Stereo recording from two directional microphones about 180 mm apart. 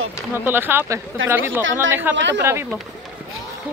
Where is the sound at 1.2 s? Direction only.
90° right.